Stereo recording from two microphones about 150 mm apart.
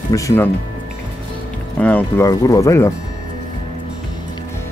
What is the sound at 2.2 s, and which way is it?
Speech, 25° left (ahead or behind).